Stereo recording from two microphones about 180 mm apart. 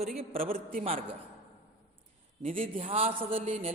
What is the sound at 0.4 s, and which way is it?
Speech, 50° right (ahead or behind).